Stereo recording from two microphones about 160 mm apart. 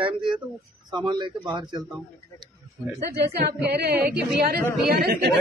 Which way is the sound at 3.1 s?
90° right.